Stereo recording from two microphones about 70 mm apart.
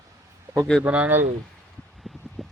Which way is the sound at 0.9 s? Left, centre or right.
Right.